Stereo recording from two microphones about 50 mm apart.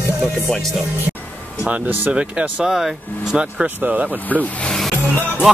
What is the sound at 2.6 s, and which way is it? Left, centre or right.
Speech, centre.